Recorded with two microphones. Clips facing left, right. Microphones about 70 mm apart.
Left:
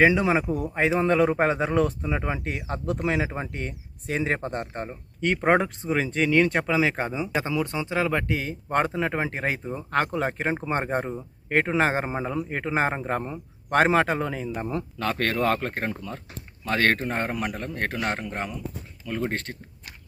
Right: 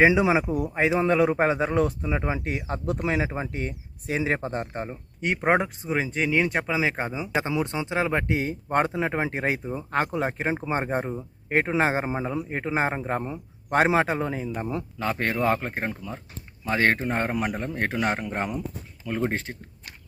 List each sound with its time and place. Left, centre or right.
0.0 s a man's voice: centre
5.2 s speech: centre
7.4 s speech: right
9.9 s a man's voice: centre